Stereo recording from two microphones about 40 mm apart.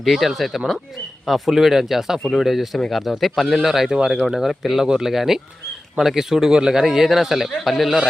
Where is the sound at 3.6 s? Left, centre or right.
Centre.